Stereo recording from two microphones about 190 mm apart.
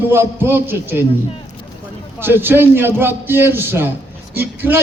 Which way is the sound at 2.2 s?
10° right (ahead or behind).